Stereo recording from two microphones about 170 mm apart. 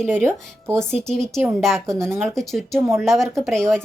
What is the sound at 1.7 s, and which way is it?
Speech, 15° right (ahead or behind).